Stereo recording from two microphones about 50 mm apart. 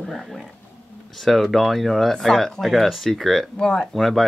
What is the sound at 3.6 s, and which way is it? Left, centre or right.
Speech, centre.